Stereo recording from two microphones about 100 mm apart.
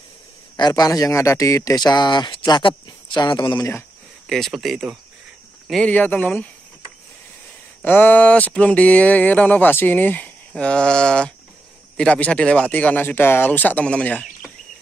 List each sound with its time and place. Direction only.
0.6 s speech: 45° left (ahead or behind)
4.3 s speech: centre (ahead or behind)
5.9 s speech: 15° left (ahead or behind)
7.8 s speech: 15° left (ahead or behind)